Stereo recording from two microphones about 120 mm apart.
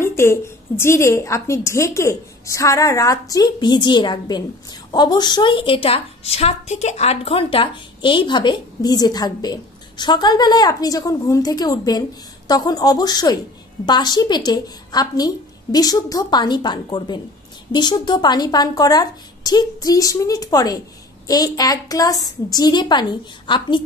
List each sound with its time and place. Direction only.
0.0 s a woman's voice: 20° left (ahead or behind); by 23.8 s 40° left (ahead or behind)